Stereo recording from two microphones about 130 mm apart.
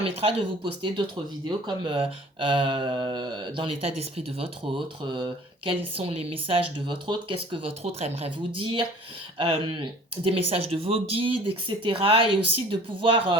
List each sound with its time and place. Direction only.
0.0 s speech: 45° right (ahead or behind)
5.9 s speech: 45° right (ahead or behind)